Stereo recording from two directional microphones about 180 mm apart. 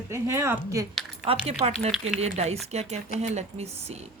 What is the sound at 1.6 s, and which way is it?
Speech, 30° right (ahead or behind).